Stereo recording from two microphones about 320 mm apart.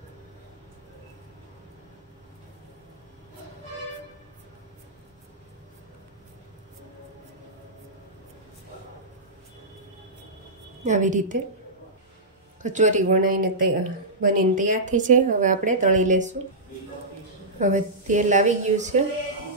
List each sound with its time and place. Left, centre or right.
10.8 s speech: right
12.6 s speech: right
17.6 s speech: right